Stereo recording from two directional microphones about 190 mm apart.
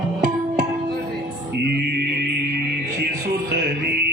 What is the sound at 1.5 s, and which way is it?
Music, 60° right (ahead or behind).